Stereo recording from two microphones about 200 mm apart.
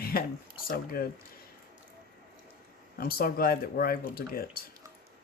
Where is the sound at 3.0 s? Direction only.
50° left (ahead or behind).